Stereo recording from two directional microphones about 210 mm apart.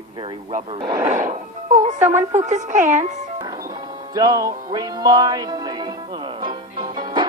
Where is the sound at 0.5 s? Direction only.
30° right (ahead or behind).